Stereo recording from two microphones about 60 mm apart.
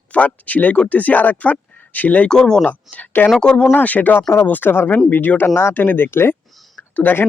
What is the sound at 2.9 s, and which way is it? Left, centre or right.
Speech, left.